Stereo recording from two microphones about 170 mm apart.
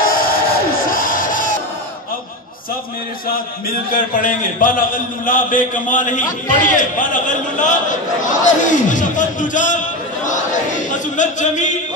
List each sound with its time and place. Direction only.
0.0 s music: 55° left (ahead or behind)
3.6 s a man's voice: 55° left (ahead or behind)